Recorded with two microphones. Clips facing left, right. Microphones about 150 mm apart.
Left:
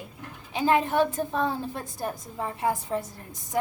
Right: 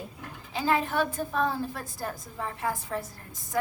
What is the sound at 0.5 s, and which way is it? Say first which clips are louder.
A woman's voice: left 4 dB; 20° left (ahead or behind).